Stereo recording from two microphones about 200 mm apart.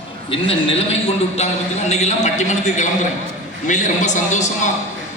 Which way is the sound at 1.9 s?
35° left (ahead or behind).